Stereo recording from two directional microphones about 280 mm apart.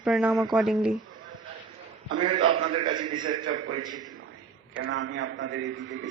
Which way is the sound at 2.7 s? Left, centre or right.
Centre.